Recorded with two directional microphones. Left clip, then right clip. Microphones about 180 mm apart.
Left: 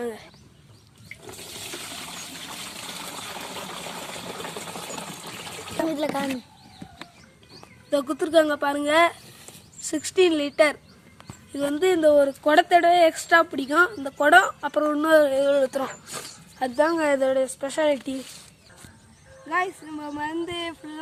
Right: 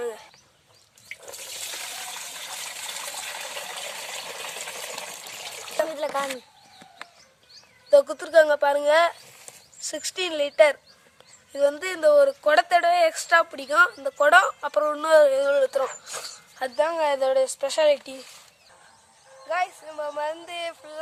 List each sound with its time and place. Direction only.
5.9 s speech: 5° right (ahead or behind)
7.9 s speech: 5° right (ahead or behind)
19.5 s speech: 20° right (ahead or behind)